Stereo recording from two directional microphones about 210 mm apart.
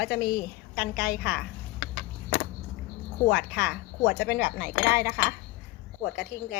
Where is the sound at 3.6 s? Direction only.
45° left (ahead or behind).